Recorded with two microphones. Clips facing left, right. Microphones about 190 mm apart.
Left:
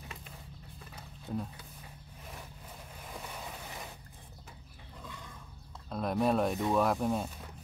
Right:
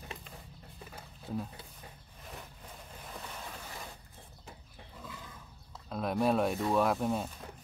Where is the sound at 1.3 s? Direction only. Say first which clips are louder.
Even; centre (ahead or behind).